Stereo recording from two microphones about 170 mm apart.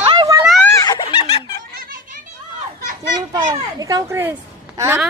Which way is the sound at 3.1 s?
25° right (ahead or behind).